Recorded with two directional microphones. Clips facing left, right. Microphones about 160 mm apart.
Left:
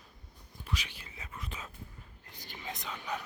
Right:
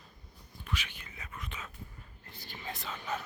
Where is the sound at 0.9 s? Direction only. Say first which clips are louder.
Even; 30° left (ahead or behind).